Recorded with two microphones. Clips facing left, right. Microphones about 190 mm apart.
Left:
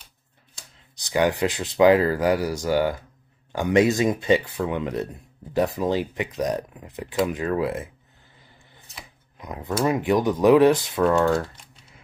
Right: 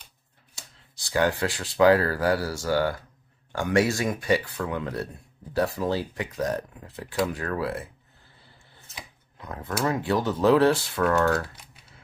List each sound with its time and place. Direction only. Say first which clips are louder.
0.9 s speech: left 3 dB; 15° left (ahead or behind)
9.4 s speech: left 4 dB; 15° left (ahead or behind)